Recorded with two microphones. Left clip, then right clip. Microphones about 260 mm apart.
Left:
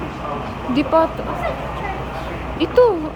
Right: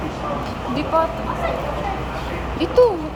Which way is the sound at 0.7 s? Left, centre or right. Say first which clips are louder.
Left 4 dB; left.